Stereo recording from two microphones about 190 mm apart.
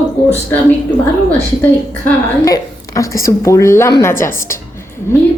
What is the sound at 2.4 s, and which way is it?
Speech, 15° left (ahead or behind).